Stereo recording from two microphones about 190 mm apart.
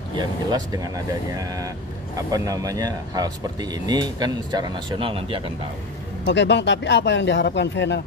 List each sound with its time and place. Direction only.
0.1 s speech: 20° right (ahead or behind)
6.2 s speech: 65° left (ahead or behind)